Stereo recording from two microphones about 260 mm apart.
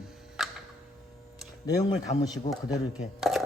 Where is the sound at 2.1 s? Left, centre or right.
Left.